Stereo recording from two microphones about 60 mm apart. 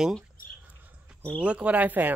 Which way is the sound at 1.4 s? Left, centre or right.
Right.